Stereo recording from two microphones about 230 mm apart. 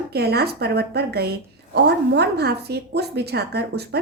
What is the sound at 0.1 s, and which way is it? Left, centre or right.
A woman's voice, right.